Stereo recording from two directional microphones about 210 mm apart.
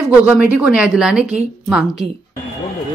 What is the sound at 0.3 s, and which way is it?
A woman's voice, 5° right (ahead or behind).